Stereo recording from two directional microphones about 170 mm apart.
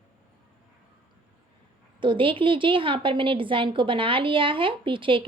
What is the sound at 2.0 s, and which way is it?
A woman's voice, 30° right (ahead or behind).